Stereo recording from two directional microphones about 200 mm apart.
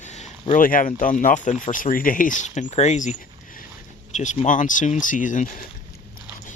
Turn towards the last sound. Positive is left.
turn(degrees=40)  # may be behind; listen again after turning